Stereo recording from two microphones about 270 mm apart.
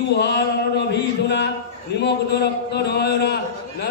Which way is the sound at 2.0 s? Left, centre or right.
Left.